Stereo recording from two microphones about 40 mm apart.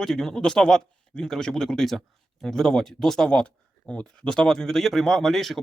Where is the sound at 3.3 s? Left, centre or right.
Left.